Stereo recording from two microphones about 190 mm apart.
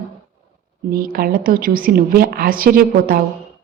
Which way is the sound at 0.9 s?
50° right (ahead or behind).